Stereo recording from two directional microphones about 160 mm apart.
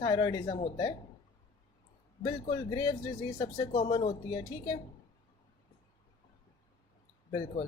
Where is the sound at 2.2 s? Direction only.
25° left (ahead or behind).